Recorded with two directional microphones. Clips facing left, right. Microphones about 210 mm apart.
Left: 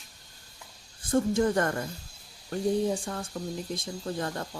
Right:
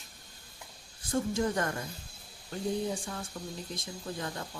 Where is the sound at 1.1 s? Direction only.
55° left (ahead or behind).